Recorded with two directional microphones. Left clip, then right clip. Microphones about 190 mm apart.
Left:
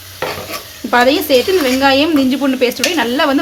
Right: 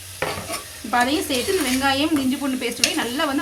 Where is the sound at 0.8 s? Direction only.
40° left (ahead or behind).